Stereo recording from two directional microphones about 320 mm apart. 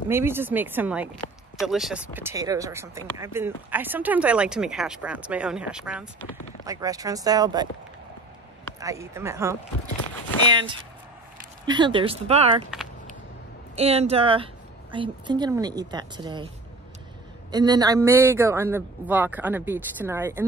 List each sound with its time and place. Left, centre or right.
0.1 s speech: centre
8.7 s speech: centre
11.6 s speech: centre
13.7 s speech: centre
17.5 s speech: centre